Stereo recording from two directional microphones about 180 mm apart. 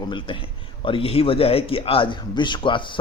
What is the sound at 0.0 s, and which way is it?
A man's voice, 25° left (ahead or behind).